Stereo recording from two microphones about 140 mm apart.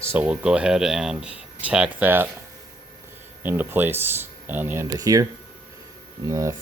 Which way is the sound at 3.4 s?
15° right (ahead or behind).